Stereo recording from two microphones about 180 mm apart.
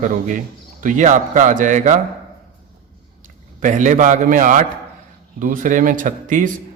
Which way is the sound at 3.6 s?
45° right (ahead or behind).